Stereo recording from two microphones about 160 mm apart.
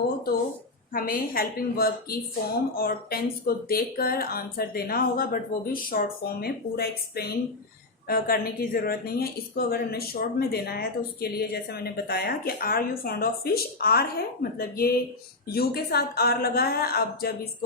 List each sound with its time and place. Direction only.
0.9 s a woman's voice: 65° left (ahead or behind)